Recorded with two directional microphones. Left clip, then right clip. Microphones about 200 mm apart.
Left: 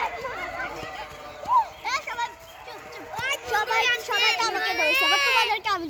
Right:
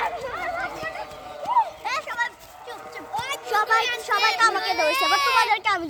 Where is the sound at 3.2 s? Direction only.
70° right (ahead or behind).